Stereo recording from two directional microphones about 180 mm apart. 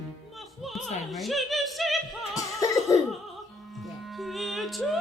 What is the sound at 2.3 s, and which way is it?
Music, 20° left (ahead or behind).